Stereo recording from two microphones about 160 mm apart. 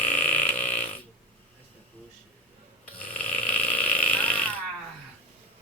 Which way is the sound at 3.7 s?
10° left (ahead or behind).